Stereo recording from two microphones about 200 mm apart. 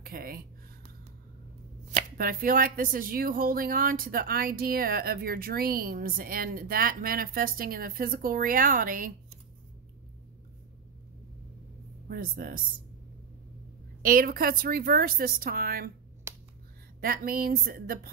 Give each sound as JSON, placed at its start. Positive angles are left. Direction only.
{"t": 0.0, "sound": "speech", "side_deg": -45}
{"t": 1.9, "sound": "speech", "side_deg": -40}
{"t": 12.1, "sound": "speech", "side_deg": -45}
{"t": 14.0, "sound": "speech", "side_deg": -45}
{"t": 16.3, "sound": "finger snapping", "side_deg": -15}
{"t": 17.0, "sound": "speech", "side_deg": -45}